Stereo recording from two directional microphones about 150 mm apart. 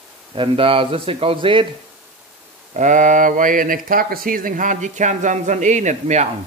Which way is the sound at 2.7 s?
55° right (ahead or behind).